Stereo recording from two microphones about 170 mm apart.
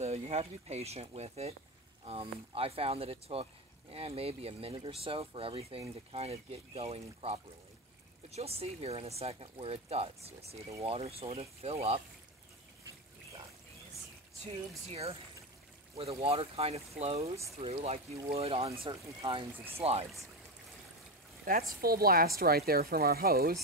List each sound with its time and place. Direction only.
0.0 s speech: 40° right (ahead or behind)
14.9 s speech: 35° right (ahead or behind)
19.8 s speech: 35° right (ahead or behind)
21.5 s speech: 60° right (ahead or behind)